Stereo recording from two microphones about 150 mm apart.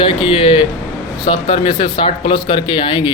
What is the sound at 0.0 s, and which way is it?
Speech, 35° left (ahead or behind).